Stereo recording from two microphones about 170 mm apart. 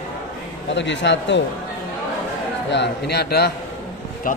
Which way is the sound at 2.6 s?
90° left.